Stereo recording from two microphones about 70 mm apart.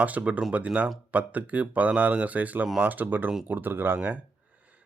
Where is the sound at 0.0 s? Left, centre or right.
Right.